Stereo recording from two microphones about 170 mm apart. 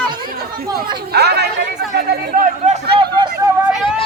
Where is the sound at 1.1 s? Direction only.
75° right (ahead or behind).